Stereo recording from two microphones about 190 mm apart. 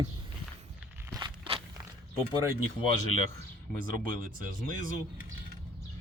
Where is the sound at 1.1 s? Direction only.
20° right (ahead or behind).